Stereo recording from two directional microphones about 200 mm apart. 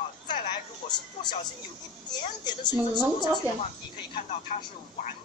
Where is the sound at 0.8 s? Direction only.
20° left (ahead or behind).